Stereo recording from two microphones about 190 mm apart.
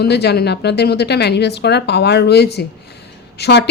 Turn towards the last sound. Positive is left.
turn(degrees=60)  # may be behind; listen again after turning